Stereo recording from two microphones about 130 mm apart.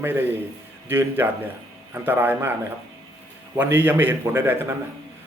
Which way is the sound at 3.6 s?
15° right (ahead or behind).